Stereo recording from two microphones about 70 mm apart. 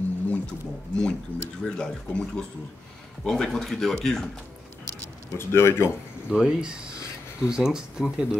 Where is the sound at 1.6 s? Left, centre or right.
Centre.